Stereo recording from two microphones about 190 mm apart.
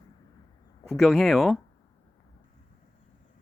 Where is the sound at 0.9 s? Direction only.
Centre (ahead or behind).